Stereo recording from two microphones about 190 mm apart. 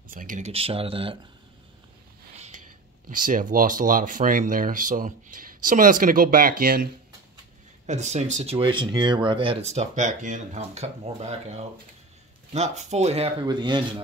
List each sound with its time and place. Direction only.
0.1 s speech: 45° right (ahead or behind)
0.5 s speech: 30° right (ahead or behind)
2.3 s a sound: 35° right (ahead or behind)
3.1 s speech: 45° right (ahead or behind)
7.8 s speech: 35° right (ahead or behind)